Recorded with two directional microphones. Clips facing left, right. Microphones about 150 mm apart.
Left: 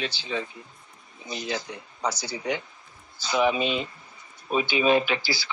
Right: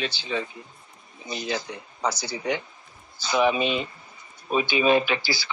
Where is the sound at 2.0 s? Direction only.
75° right (ahead or behind).